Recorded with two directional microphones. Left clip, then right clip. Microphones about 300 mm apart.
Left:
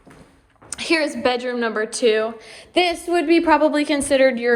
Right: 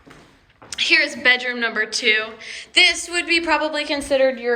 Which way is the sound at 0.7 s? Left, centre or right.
Centre.